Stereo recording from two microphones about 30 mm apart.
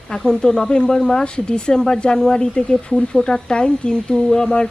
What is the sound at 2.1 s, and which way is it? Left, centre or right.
Speech, centre.